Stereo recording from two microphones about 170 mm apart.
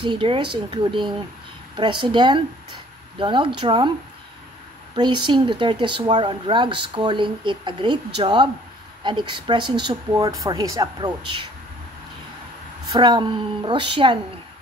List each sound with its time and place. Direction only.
0.0 s speech: 30° right (ahead or behind)
4.9 s speech: 25° right (ahead or behind)
12.9 s speech: 25° right (ahead or behind)